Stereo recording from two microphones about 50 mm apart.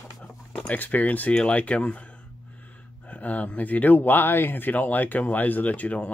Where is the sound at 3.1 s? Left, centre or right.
Left.